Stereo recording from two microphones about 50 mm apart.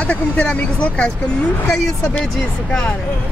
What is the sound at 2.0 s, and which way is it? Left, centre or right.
Speech, centre.